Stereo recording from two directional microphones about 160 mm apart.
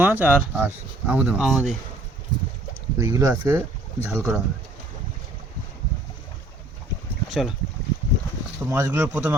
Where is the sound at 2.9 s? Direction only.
20° right (ahead or behind).